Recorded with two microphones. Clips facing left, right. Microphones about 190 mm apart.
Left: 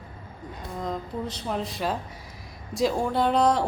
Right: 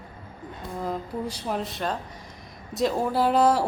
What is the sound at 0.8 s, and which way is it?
A woman's voice, 10° right (ahead or behind).